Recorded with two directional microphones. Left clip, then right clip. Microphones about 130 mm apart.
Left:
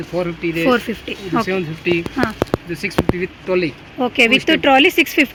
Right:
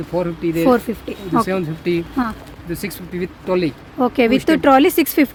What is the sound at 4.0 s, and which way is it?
Speech, 25° right (ahead or behind).